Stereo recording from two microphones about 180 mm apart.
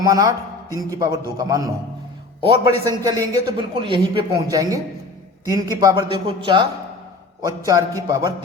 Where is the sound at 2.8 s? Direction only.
20° right (ahead or behind).